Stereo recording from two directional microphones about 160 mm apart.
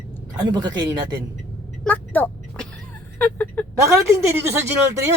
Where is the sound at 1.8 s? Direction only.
10° left (ahead or behind).